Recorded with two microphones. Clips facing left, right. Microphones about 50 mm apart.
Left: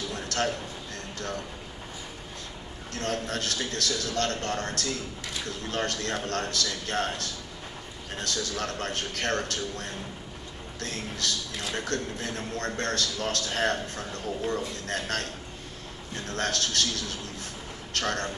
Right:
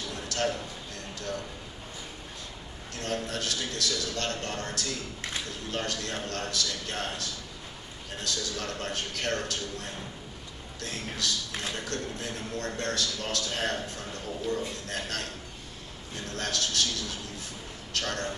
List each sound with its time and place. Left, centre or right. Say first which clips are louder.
0.1 s a sound: left 1 dB; left
2.9 s a man's voice: left 2 dB; left
16.3 s a man's voice: left 3 dB; left